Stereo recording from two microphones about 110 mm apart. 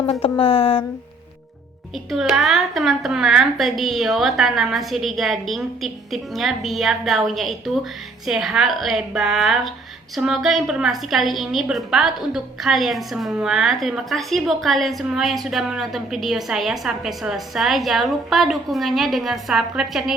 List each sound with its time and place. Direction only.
0.1 s speech: 60° left (ahead or behind)
2.0 s a woman's voice: 5° right (ahead or behind)